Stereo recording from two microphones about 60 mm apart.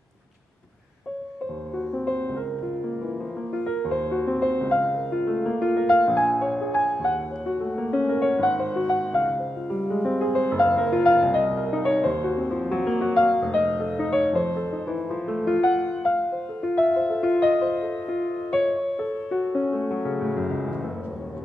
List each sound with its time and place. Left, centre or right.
2.0 s music: centre
3.6 s music: centre
4.8 s music: centre
6.2 s music: centre
7.8 s music: centre
12.9 s music: centre